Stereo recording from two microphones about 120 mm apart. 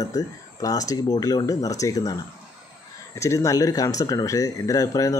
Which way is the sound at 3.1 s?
25° left (ahead or behind).